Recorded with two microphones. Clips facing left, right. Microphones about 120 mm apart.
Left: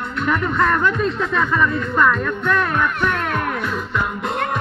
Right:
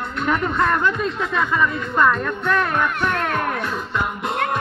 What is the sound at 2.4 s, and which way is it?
Speech, 30° right (ahead or behind).